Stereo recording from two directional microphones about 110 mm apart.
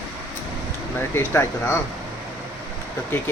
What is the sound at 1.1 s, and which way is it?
Speech, 20° left (ahead or behind).